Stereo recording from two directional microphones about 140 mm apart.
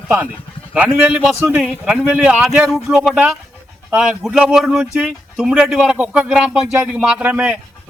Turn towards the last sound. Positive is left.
turn(degrees=-10)  # may be behind; listen again after turning